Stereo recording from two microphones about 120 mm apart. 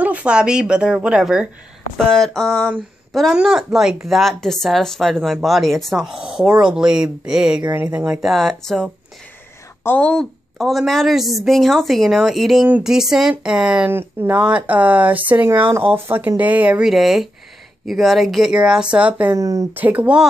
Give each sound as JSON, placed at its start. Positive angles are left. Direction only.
{"t": 0.0, "sound": "speech", "side_deg": -10}
{"t": 2.0, "sound": "speech", "side_deg": 5}
{"t": 19.3, "sound": "speech", "side_deg": -25}
{"t": 19.7, "sound": "speech", "side_deg": -15}